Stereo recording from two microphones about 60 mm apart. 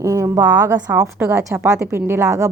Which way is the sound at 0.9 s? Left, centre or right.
Right.